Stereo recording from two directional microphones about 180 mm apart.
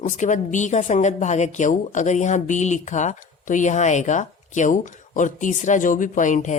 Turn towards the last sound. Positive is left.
turn(degrees=45)  # may be behind; listen again after turning